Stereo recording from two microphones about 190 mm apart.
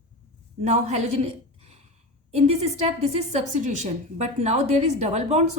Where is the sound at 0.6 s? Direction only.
35° right (ahead or behind).